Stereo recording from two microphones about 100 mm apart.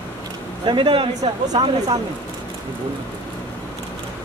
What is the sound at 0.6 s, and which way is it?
Speech, 55° right (ahead or behind).